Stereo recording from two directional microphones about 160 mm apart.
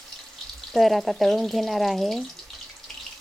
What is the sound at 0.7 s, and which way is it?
Speech, centre (ahead or behind).